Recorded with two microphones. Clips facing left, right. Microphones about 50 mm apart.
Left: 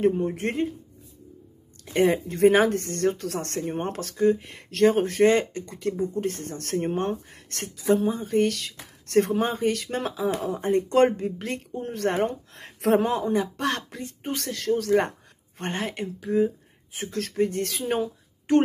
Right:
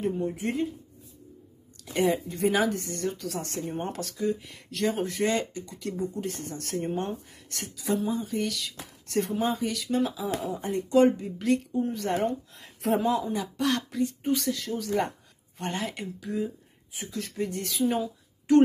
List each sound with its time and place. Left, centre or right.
0.2 s speech: left
2.2 s speech: left
2.5 s speech: left
2.8 s speech: left
3.6 s speech: left
7.7 s speech: left
9.5 s speech: left
11.4 s speech: left
11.8 s speech: left
12.2 s speech: left
13.0 s speech: left
14.3 s speech: left
16.9 s a woman's voice: left